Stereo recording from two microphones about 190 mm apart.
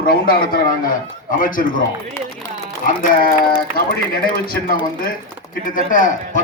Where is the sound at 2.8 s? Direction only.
45° left (ahead or behind).